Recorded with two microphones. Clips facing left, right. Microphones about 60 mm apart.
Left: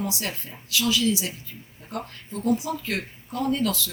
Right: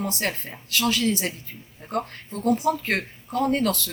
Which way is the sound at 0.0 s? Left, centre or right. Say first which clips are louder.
Right 3 dB; right.